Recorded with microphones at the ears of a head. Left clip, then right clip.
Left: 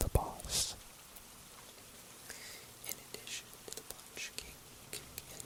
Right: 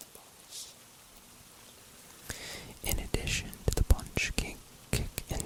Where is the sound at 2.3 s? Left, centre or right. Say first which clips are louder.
Right 9 dB; right.